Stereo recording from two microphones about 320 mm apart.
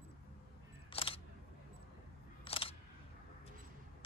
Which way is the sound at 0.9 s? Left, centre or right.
Centre.